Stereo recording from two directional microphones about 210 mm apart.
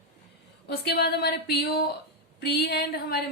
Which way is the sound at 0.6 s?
50° left (ahead or behind).